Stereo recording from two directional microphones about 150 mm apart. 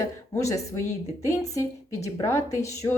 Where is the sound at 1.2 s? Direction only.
20° left (ahead or behind).